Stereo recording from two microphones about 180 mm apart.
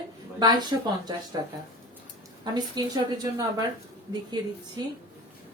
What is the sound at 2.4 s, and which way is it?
A woman's voice, 25° right (ahead or behind).